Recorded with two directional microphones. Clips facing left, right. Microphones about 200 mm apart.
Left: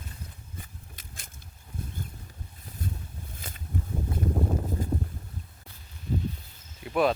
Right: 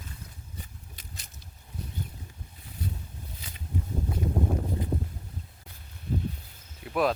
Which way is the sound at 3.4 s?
50° left (ahead or behind).